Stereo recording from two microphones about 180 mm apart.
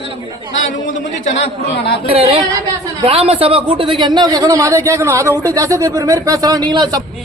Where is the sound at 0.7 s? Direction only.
45° left (ahead or behind).